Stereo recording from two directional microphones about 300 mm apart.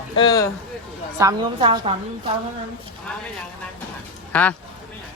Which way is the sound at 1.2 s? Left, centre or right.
Centre.